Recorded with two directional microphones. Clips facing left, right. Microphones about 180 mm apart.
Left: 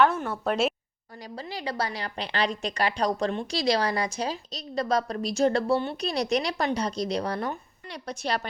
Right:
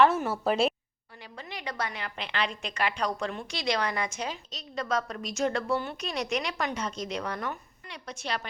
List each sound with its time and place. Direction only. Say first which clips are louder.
0.0 s a woman's voice: even; 5° right (ahead or behind)
1.4 s a woman's voice: left 4 dB; 30° left (ahead or behind)